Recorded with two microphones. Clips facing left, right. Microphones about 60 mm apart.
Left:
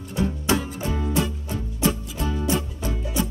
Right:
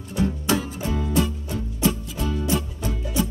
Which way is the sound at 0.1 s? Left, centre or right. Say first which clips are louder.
Even; left.